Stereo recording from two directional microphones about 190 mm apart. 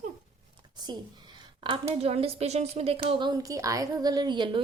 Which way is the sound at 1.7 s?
30° right (ahead or behind).